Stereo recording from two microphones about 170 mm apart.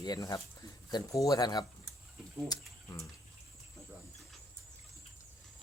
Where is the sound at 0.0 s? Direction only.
20° left (ahead or behind).